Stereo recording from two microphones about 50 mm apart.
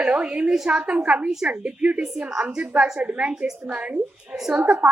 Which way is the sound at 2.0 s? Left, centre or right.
Centre.